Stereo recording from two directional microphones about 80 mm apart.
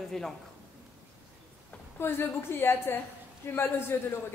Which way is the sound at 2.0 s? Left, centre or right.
Left.